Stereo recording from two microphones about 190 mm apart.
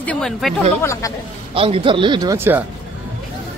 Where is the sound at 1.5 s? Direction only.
30° right (ahead or behind); by 2.6 s 10° right (ahead or behind).